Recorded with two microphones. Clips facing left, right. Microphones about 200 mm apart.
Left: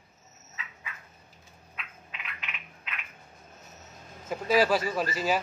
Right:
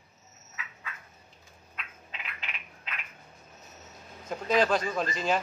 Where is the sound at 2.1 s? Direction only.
35° right (ahead or behind).